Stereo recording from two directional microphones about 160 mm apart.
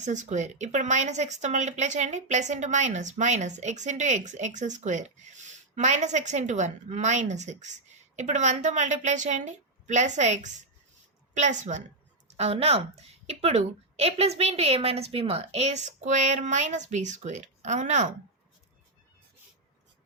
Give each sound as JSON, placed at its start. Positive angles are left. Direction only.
{"t": 0.0, "sound": "a woman's voice", "side_deg": -50}